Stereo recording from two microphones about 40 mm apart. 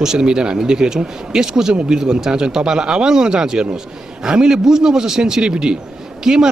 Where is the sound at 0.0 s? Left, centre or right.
Centre.